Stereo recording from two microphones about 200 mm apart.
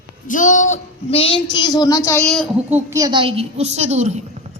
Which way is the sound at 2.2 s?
Centre (ahead or behind).